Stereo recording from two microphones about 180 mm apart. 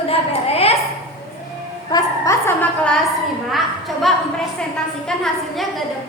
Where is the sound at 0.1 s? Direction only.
35° left (ahead or behind).